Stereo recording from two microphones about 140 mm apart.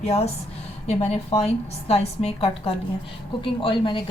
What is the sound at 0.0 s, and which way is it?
A woman's voice, 50° left (ahead or behind).